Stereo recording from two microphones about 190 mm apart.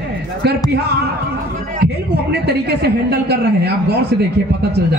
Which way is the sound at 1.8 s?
60° right (ahead or behind).